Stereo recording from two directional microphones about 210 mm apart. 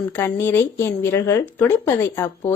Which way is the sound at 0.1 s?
10° left (ahead or behind).